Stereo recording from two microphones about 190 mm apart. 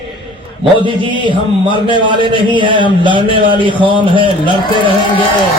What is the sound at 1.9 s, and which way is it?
A man's voice, 25° right (ahead or behind).